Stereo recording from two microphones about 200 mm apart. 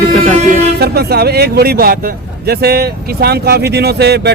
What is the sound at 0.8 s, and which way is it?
Speech, 50° right (ahead or behind).